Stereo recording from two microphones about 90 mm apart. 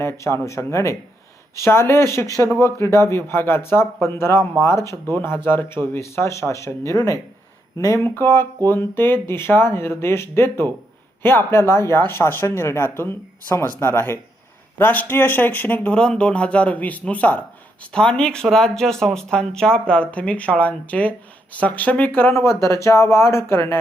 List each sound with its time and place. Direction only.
0.0 s speech: 30° left (ahead or behind)
22.4 s speech: 35° left (ahead or behind)